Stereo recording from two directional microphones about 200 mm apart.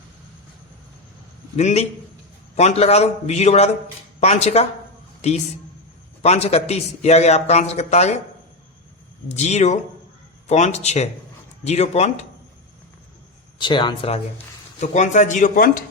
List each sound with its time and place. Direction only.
1.5 s a man's voice: 35° left (ahead or behind)
6.2 s a man's voice: 30° left (ahead or behind)
9.3 s a man's voice: 35° left (ahead or behind)
13.6 s speech: 25° left (ahead or behind)
14.8 s a man's voice: 35° left (ahead or behind)